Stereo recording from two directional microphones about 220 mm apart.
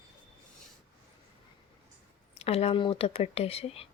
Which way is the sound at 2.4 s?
25° left (ahead or behind).